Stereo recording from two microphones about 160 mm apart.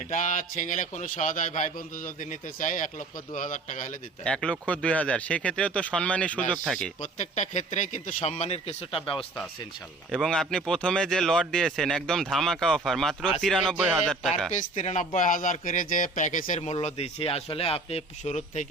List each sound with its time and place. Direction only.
0.1 s a man's voice: 50° left (ahead or behind)
4.2 s speech: 5° left (ahead or behind)
7.0 s a man's voice: 50° left (ahead or behind)
10.1 s speech: 5° left (ahead or behind)
14.5 s a man's voice: 50° left (ahead or behind)
16.6 s speech: 40° left (ahead or behind)